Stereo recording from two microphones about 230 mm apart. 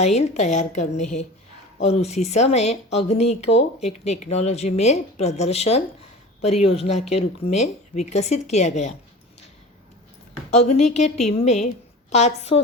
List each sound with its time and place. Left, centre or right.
0.0 s a woman's voice: left
10.7 s speech: left